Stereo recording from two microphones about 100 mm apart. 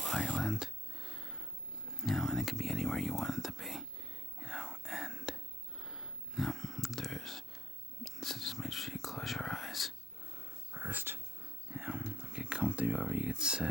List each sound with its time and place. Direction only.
0.0 s a sound: 10° left (ahead or behind)
0.3 s a sound: 5° right (ahead or behind)
2.0 s speech: centre (ahead or behind)
4.4 s whispering: 5° right (ahead or behind)
10.7 s wheeze: 15° right (ahead or behind)
11.7 s horse: 10° right (ahead or behind)
12.3 s speech: 5° right (ahead or behind)